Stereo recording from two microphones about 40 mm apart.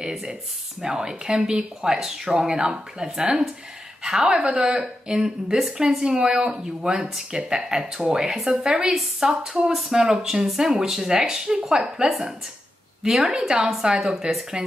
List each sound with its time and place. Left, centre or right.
0.1 s speech: centre